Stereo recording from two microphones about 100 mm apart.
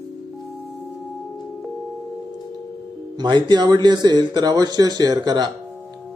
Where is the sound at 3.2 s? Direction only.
45° right (ahead or behind).